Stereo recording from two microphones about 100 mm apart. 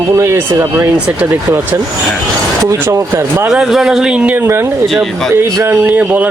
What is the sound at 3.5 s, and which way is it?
Speech, 5° right (ahead or behind).